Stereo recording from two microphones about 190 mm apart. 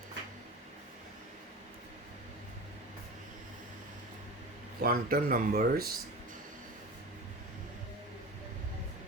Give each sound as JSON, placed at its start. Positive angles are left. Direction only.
{"t": 4.8, "sound": "speech", "side_deg": -50}